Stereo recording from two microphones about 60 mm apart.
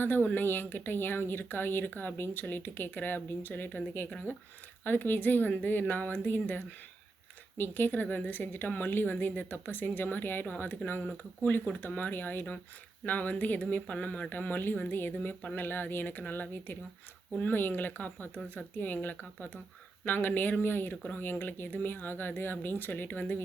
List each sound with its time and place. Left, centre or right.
0.0 s a woman's voice: left
20.9 s speech: centre
21.2 s a woman's voice: left